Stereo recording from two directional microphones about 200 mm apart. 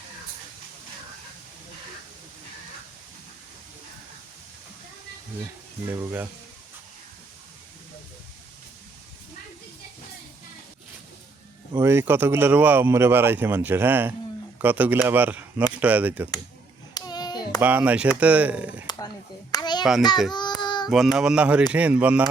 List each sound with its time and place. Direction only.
5.9 s speech: 10° right (ahead or behind)
11.7 s speech: 15° right (ahead or behind)
16.9 s clapping: 20° left (ahead or behind)
17.6 s speech: 10° right (ahead or behind)
18.9 s a sound: 20° left (ahead or behind)
20.3 s child singing: 20° left (ahead or behind)
20.9 s speech: centre (ahead or behind)